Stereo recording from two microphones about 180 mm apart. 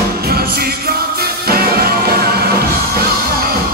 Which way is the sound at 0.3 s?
60° right (ahead or behind).